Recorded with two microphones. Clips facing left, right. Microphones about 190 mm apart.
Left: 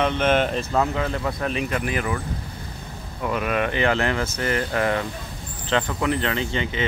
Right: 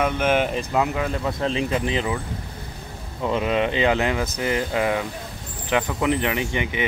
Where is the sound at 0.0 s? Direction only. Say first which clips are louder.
Even; 10° right (ahead or behind).